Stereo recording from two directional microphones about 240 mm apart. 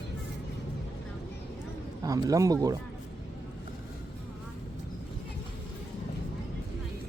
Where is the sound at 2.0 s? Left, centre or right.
Centre.